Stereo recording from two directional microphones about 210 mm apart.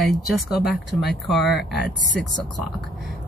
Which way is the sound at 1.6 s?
50° left (ahead or behind).